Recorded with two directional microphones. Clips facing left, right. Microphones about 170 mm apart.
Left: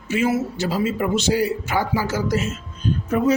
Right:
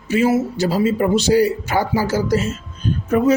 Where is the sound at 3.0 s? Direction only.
50° right (ahead or behind).